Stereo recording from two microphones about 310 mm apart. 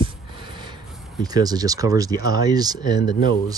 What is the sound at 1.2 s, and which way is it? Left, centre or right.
Speech, centre.